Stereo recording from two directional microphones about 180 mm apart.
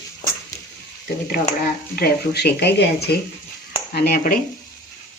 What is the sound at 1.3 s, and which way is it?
Speech, 60° left (ahead or behind).